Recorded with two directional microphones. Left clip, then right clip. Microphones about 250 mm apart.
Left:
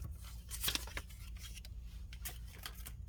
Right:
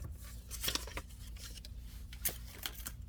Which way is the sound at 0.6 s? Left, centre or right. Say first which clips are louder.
Right 1 dB; centre.